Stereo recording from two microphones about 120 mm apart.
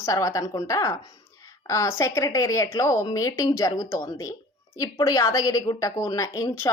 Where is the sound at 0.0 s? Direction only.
25° left (ahead or behind).